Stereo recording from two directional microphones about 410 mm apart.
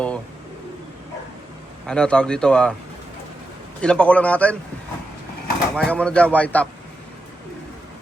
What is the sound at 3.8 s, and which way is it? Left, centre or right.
Speech, centre.